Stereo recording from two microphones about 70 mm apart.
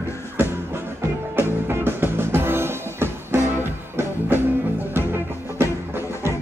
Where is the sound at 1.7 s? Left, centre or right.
Right.